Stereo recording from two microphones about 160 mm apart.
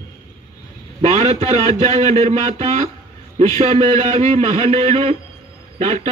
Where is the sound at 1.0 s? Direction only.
45° right (ahead or behind).